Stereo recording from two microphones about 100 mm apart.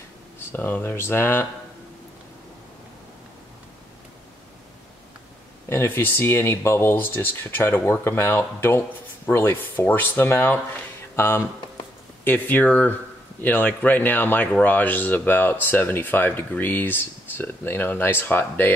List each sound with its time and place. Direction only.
0.5 s speech: 20° left (ahead or behind)
5.7 s speech: 20° left (ahead or behind)